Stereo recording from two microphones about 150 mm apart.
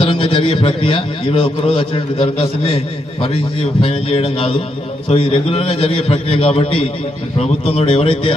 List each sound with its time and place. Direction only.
0.0 s a man's voice: 35° left (ahead or behind)